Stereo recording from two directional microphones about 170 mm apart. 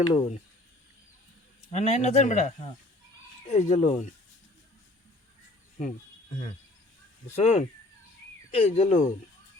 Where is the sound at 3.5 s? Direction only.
40° left (ahead or behind).